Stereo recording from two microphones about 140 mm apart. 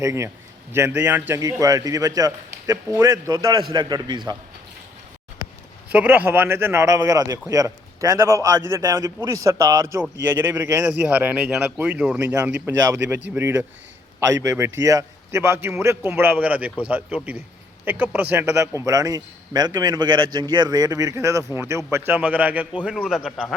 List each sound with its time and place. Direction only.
0.0 s a man's voice: 20° right (ahead or behind)
5.9 s a man's voice: 10° right (ahead or behind); by 10.0 s 30° right (ahead or behind)
10.0 s speech: 15° right (ahead or behind)
12.3 s a man's voice: 20° right (ahead or behind)
17.8 s a man's voice: 10° right (ahead or behind)